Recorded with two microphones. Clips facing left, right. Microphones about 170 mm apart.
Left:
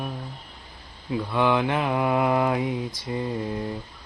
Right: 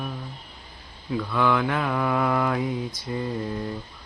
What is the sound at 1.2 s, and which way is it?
Mantra, 25° left (ahead or behind).